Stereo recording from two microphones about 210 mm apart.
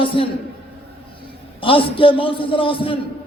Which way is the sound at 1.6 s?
25° left (ahead or behind).